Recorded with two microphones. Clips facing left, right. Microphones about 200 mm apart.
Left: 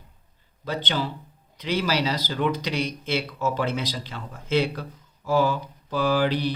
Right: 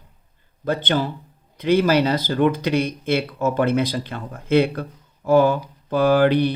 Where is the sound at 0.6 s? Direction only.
50° right (ahead or behind).